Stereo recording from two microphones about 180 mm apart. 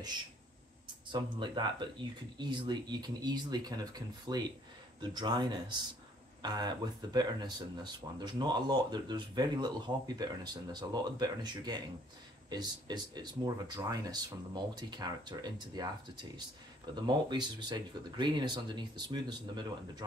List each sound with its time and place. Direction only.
1.0 s speech: 25° right (ahead or behind)